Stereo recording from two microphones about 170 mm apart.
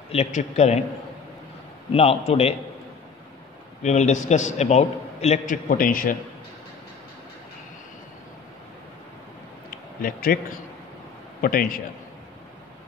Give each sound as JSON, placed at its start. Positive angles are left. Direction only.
{"t": 0.1, "sound": "a man's voice", "side_deg": 40}
{"t": 1.9, "sound": "a man's voice", "side_deg": 35}
{"t": 3.8, "sound": "a man's voice", "side_deg": 45}
{"t": 9.7, "sound": "a sound", "side_deg": 60}
{"t": 11.4, "sound": "a man's voice", "side_deg": 55}